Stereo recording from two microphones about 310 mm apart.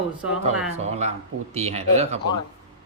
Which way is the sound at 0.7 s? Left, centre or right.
Right.